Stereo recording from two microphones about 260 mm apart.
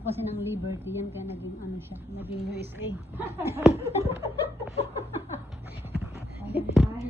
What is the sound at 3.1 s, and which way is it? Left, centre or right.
Speech, centre.